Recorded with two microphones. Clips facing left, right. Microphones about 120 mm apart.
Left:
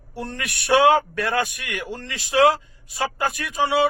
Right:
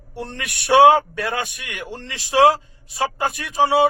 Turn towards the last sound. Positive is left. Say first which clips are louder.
# right 4 dB
turn(degrees=-30)  # may be behind; listen again after turning